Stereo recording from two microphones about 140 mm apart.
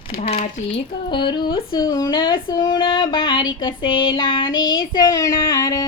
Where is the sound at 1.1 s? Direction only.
35° left (ahead or behind).